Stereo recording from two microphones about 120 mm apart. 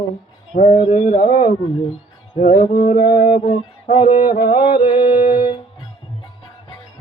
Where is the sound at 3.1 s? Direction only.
45° left (ahead or behind).